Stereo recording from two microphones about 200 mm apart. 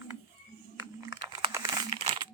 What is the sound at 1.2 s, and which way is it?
Crumpling, 20° right (ahead or behind).